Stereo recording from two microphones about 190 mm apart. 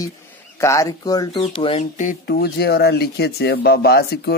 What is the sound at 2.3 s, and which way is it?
Speech, 60° left (ahead or behind).